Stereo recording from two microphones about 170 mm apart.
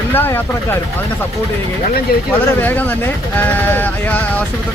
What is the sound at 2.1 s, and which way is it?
Speech, 60° left (ahead or behind).